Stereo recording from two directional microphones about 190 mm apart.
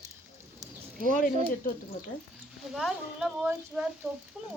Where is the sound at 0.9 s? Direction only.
45° right (ahead or behind).